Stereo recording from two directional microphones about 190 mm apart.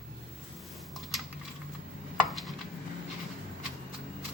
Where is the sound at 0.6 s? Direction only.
Centre (ahead or behind).